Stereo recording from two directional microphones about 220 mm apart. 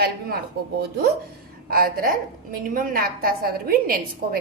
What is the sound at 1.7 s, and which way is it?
A woman's voice, 40° right (ahead or behind).